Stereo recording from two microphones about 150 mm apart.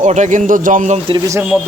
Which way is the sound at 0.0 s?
55° right (ahead or behind).